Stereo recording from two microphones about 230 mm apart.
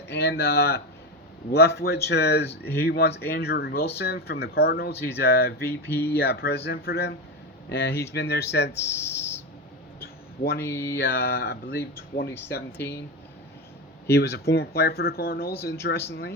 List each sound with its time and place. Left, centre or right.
0.1 s speech: left
5.6 s speech: centre
6.1 s speech: left
8.7 s speech: centre
10.0 s a sound: left
10.6 s speech: centre
11.0 s speech: left
12.7 s speech: centre
14.1 s speech: left